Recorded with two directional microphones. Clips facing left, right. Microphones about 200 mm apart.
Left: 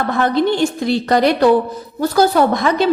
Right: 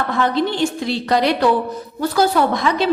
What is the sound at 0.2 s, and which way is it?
A woman's voice, 50° left (ahead or behind).